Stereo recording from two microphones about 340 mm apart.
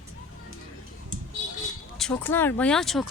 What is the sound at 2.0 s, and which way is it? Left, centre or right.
Speech, centre.